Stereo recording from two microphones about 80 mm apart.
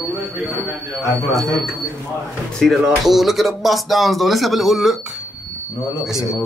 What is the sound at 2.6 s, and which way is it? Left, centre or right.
Speech, centre.